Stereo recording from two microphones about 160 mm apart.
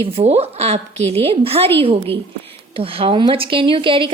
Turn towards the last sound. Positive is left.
turn(degrees=-35)  # may be behind; listen again after turning